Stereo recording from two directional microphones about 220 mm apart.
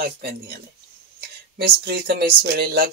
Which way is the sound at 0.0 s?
45° right (ahead or behind).